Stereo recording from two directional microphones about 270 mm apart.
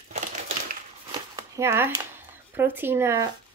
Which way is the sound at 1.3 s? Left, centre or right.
Centre.